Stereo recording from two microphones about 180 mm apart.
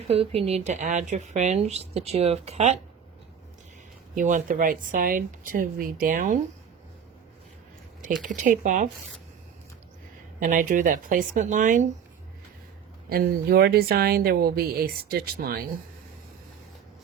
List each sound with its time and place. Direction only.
0.1 s a woman's voice: 35° right (ahead or behind)
4.1 s speech: 45° right (ahead or behind)
8.2 s speech: 45° right (ahead or behind)
10.4 s speech: 45° right (ahead or behind)
13.1 s a woman's voice: 60° right (ahead or behind)